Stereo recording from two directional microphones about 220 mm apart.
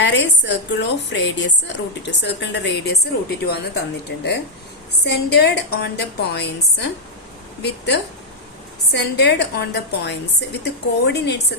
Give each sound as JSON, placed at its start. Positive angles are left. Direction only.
{"t": 0.0, "sound": "a woman's voice", "side_deg": 55}